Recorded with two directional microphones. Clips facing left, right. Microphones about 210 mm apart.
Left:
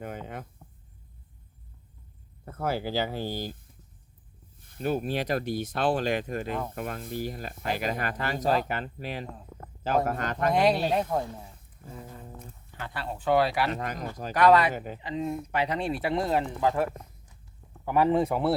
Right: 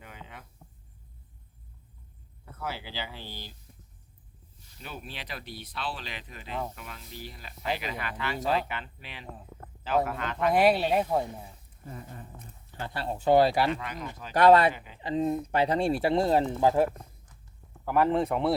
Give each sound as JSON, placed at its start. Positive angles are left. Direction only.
{"t": 0.0, "sound": "a sound", "side_deg": 45}
{"t": 2.4, "sound": "speech", "side_deg": 45}
{"t": 4.6, "sound": "speech", "side_deg": 50}
{"t": 10.5, "sound": "speech", "side_deg": -5}
{"t": 12.7, "sound": "speech", "side_deg": -30}
{"t": 13.7, "sound": "speech", "side_deg": 45}
{"t": 14.3, "sound": "speech", "side_deg": -30}
{"t": 14.7, "sound": "speech", "side_deg": 45}
{"t": 15.0, "sound": "speech", "side_deg": -35}
{"t": 17.8, "sound": "speech", "side_deg": 0}